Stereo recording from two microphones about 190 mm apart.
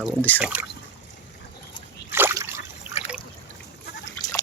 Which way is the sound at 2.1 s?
15° right (ahead or behind).